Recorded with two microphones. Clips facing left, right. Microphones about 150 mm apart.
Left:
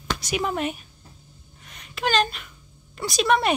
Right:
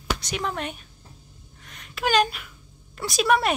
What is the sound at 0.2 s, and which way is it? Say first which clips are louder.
Speech: left 4 dB; 10° left (ahead or behind).